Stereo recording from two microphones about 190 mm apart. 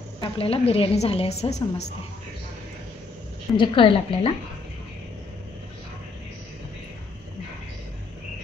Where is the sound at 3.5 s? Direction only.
25° left (ahead or behind).